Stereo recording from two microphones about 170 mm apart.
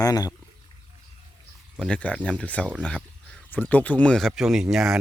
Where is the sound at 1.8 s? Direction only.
5° left (ahead or behind).